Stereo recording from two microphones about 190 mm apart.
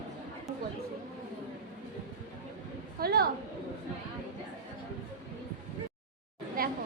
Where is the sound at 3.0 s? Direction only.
55° right (ahead or behind).